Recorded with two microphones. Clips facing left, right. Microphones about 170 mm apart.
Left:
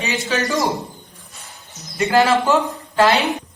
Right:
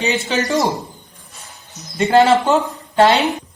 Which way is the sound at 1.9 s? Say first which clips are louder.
Right 3 dB; 25° right (ahead or behind).